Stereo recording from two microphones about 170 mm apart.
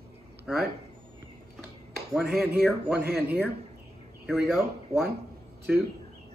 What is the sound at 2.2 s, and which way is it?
Speech, 70° right (ahead or behind).